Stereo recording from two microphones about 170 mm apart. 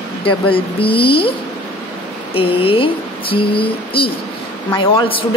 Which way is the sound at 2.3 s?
30° left (ahead or behind).